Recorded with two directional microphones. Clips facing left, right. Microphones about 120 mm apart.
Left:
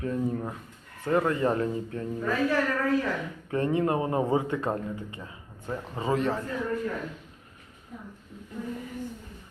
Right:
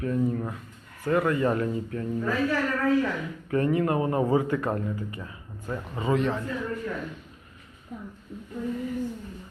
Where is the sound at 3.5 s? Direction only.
25° left (ahead or behind).